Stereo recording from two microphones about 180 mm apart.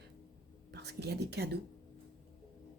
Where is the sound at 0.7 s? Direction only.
65° right (ahead or behind).